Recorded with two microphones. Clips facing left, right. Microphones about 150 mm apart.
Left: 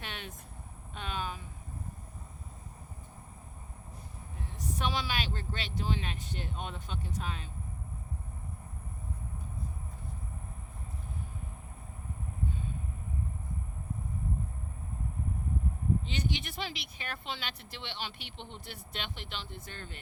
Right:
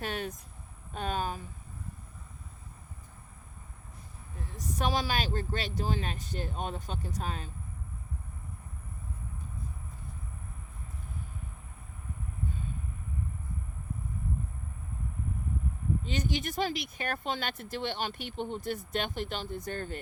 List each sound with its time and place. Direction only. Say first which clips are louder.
0.0 s vehicle: right 9 dB; 40° right (ahead or behind)
0.9 s speech: right 5 dB; 45° right (ahead or behind)
4.5 s speech: right 3 dB; 40° right (ahead or behind)
16.0 s speech: right 3 dB; 45° right (ahead or behind)